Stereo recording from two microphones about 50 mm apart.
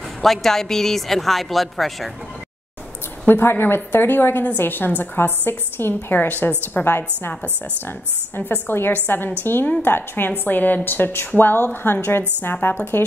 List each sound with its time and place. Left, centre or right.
0.2 s speech: centre
3.3 s a woman's voice: left
6.2 s a woman's voice: left
8.4 s a woman's voice: left